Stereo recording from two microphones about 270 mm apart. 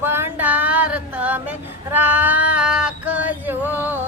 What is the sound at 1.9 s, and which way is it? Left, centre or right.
Female singing, centre.